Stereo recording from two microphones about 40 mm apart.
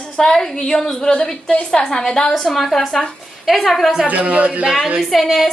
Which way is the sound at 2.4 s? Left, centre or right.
Centre.